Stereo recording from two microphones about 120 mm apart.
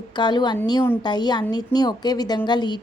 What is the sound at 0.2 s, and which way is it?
A woman's voice, 35° left (ahead or behind).